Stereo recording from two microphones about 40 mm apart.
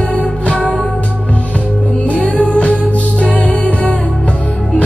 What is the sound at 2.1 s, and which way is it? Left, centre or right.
Music, left.